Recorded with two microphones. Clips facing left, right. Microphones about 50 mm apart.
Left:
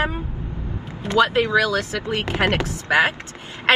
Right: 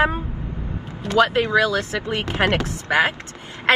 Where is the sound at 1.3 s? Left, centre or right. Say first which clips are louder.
Even; right.